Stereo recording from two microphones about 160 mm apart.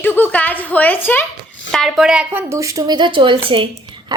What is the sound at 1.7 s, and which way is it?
A woman's voice, centre (ahead or behind).